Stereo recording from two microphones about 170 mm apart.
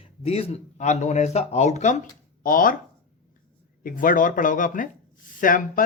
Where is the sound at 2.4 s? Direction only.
55° left (ahead or behind).